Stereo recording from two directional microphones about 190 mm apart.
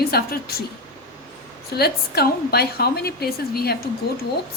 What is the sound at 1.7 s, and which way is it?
A woman's voice, 55° left (ahead or behind).